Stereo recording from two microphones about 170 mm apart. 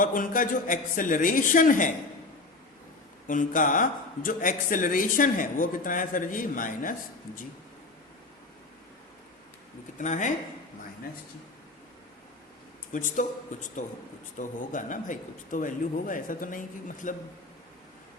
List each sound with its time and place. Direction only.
0.0 s speech: 55° left (ahead or behind)
3.2 s speech: 50° left (ahead or behind)
10.0 s speech: 45° left (ahead or behind)
12.9 s speech: 50° left (ahead or behind)